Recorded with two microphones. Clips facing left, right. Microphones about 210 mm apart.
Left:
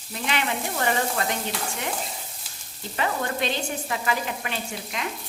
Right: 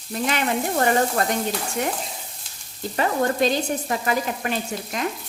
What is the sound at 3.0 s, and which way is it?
Stir, 40° right (ahead or behind).